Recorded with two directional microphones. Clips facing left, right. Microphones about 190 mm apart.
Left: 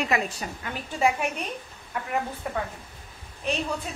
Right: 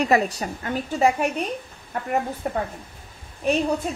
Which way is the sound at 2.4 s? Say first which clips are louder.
Right 4 dB; 40° right (ahead or behind).